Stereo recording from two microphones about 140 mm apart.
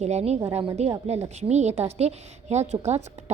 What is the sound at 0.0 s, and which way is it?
A woman's voice, 50° right (ahead or behind).